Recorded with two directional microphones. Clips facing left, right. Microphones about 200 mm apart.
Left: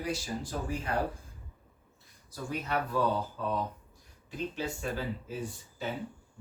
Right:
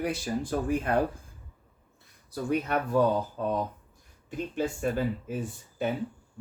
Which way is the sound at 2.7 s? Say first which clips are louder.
Right 3 dB; 50° right (ahead or behind).